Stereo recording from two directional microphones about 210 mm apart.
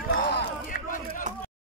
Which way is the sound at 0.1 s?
50° left (ahead or behind).